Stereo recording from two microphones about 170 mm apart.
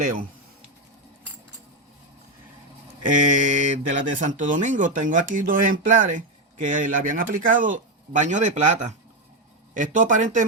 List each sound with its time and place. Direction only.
0.0 s speech: 55° right (ahead or behind)
3.0 s speech: 50° right (ahead or behind)